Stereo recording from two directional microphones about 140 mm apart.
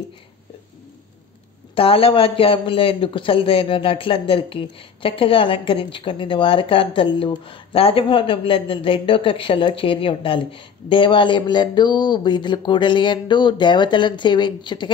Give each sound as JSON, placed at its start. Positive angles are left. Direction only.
{"t": 1.8, "sound": "a man's voice", "side_deg": 40}